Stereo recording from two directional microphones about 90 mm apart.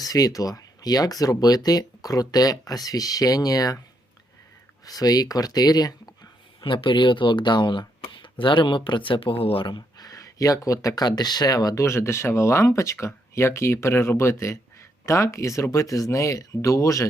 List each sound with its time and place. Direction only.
0.0 s speech: 45° left (ahead or behind)
4.9 s speech: 45° left (ahead or behind)
6.6 s speech: 65° left (ahead or behind)
10.1 s speech: 40° left (ahead or behind)
11.8 s speech: 30° left (ahead or behind)